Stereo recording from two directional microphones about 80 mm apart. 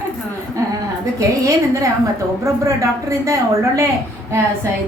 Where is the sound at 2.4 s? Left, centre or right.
Right.